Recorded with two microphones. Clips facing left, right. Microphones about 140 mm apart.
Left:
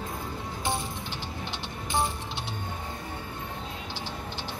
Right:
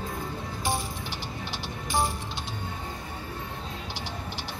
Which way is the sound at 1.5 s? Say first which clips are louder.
Right 1 dB; 20° left (ahead or behind).